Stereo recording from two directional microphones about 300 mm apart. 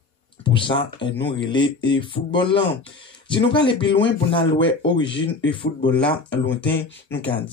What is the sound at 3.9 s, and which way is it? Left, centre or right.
Speech, centre.